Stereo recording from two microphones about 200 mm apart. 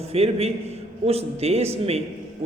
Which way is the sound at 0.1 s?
30° right (ahead or behind).